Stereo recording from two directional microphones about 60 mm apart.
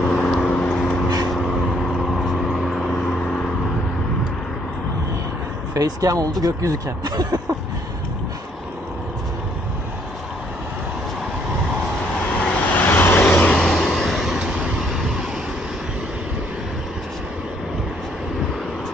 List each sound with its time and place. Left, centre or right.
0.0 s vehicle: centre
2.0 s vehicle: centre
5.8 s speech: right
12.4 s vehicle: left
12.8 s vehicle: left
13.5 s vehicle: centre
14.4 s vehicle: centre
14.9 s vehicle: centre